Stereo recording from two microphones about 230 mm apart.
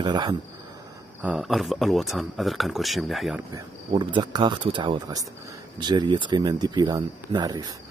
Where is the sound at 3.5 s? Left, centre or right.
Centre.